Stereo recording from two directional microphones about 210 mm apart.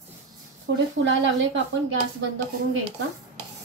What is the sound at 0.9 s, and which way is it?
Speech, 65° right (ahead or behind).